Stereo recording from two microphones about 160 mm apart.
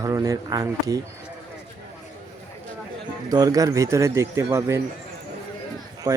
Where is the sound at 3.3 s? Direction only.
20° right (ahead or behind).